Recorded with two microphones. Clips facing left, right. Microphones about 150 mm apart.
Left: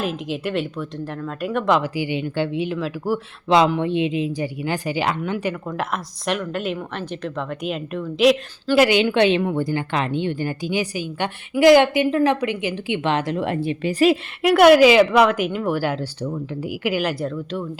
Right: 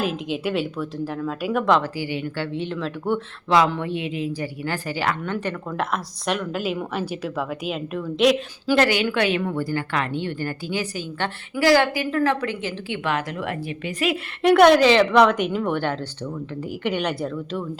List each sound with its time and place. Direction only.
0.0 s speech: centre (ahead or behind)
2.0 s speech: 20° left (ahead or behind)
3.7 s speech: 20° left (ahead or behind); by 8.4 s centre (ahead or behind)
8.9 s a woman's voice: 20° left (ahead or behind)
14.4 s speech: 5° left (ahead or behind)